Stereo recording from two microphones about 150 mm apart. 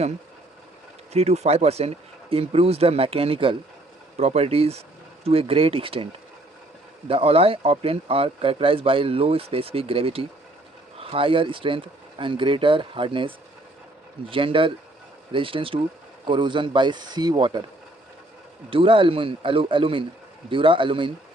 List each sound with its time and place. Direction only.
1.1 s speech: 45° right (ahead or behind)
7.1 s speech: 40° right (ahead or behind)
18.7 s speech: 35° right (ahead or behind)